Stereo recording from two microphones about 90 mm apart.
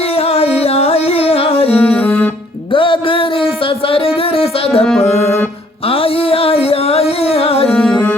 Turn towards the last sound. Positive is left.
turn(degrees=10)  # may be behind; listen again after turning